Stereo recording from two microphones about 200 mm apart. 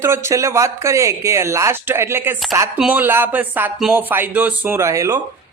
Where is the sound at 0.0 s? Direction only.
15° right (ahead or behind).